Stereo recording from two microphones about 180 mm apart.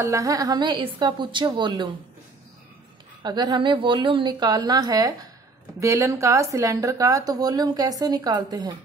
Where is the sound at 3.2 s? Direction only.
25° right (ahead or behind).